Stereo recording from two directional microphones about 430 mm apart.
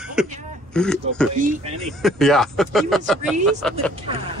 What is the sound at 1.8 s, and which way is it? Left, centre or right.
Speech, centre.